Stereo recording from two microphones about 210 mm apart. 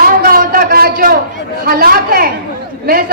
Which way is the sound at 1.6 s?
45° right (ahead or behind).